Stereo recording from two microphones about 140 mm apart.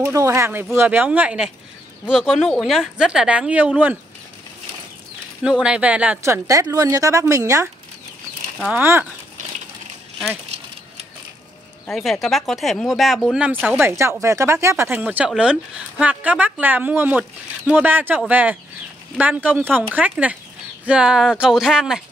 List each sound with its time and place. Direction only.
0.0 s a woman's voice: 20° right (ahead or behind)
5.4 s a woman's voice: 5° right (ahead or behind); by 7.6 s 25° right (ahead or behind)
8.5 s speech: 5° right (ahead or behind)
11.8 s speech: centre (ahead or behind)
13.7 s speech: 20° right (ahead or behind)